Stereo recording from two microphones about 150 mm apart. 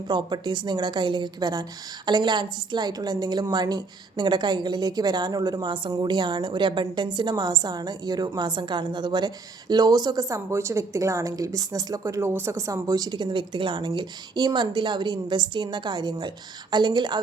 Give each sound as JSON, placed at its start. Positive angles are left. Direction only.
{"t": 0.1, "sound": "a woman's voice", "side_deg": -30}